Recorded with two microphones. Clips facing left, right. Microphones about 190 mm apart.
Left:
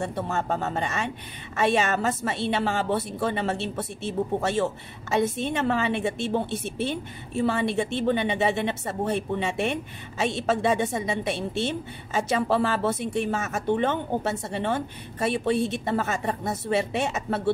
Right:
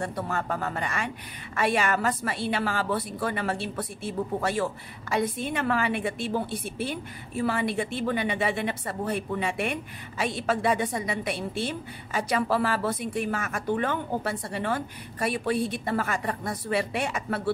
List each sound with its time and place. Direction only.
0.0 s a woman's voice: 25° left (ahead or behind)